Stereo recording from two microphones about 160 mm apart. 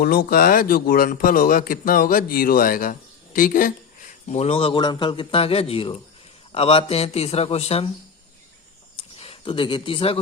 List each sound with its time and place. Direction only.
0.0 s a man's voice: 70° left (ahead or behind)
4.3 s a man's voice: 40° left (ahead or behind)
9.1 s speech: 35° left (ahead or behind)